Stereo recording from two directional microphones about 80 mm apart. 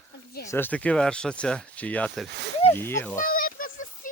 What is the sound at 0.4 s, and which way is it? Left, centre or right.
Speech, left.